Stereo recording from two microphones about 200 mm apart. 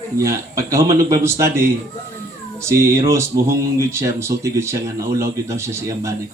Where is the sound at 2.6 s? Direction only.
15° right (ahead or behind).